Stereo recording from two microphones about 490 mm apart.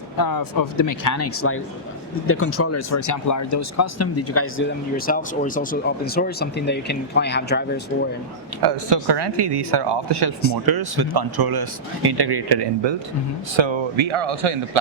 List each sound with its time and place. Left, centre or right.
0.2 s speech: left; by 7.8 s centre
8.6 s speech: right